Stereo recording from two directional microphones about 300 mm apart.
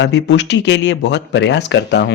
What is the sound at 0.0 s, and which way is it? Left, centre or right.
Speech, left.